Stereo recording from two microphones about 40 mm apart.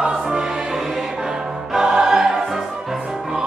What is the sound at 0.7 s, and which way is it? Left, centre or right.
Music, centre.